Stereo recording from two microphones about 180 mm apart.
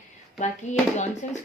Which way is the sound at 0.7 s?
40° left (ahead or behind).